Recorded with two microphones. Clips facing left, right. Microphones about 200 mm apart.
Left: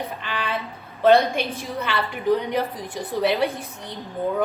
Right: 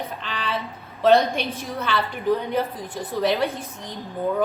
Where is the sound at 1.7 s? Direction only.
15° left (ahead or behind).